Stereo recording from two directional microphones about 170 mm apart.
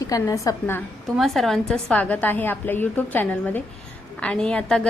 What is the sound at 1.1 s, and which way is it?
A woman's voice, centre (ahead or behind).